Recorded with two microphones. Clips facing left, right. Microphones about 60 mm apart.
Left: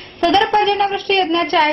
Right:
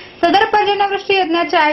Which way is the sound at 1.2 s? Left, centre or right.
Right.